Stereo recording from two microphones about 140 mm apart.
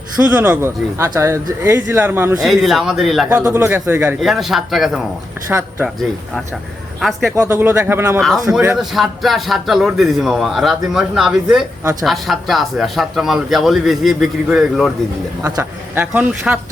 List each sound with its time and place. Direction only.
0.2 s speech: 15° right (ahead or behind)
2.4 s speech: centre (ahead or behind)
3.2 s speech: 15° right (ahead or behind)
4.2 s speech: centre (ahead or behind)
7.3 s speech: 20° right (ahead or behind)
8.2 s speech: centre (ahead or behind)
11.8 s speech: 20° right (ahead or behind)
12.0 s speech: centre (ahead or behind)
16.0 s speech: 10° right (ahead or behind)